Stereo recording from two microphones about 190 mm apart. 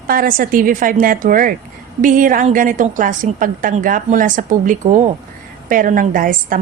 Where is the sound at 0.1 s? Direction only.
50° right (ahead or behind).